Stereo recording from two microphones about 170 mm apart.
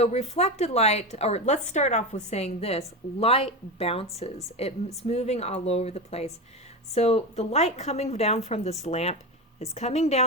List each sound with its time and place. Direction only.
0.0 s a woman's voice: 40° left (ahead or behind)